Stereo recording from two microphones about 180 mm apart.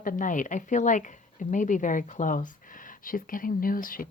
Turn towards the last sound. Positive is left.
turn(degrees=50)  # may be behind; listen again after turning